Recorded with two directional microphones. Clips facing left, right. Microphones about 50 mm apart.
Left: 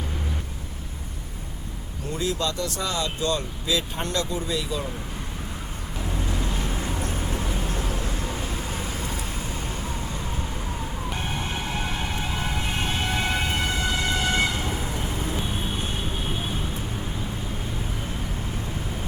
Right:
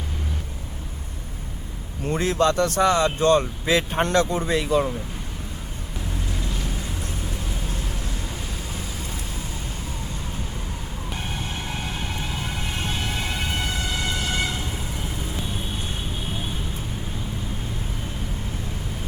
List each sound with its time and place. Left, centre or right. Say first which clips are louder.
2.1 s speech: right 7 dB; right
6.4 s vehicle: left 2 dB; left
12.5 s siren: left 1 dB; left